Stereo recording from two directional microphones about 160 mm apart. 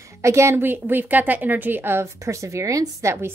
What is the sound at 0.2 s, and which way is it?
A woman's voice, 15° right (ahead or behind).